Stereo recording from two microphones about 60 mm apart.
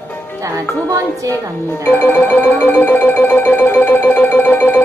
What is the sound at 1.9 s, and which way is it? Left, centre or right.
Music, left.